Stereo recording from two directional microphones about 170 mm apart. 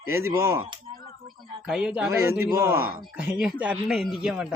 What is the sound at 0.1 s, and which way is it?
Speech, 15° right (ahead or behind).